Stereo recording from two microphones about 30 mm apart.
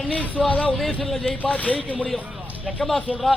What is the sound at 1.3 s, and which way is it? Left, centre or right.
Speech, left.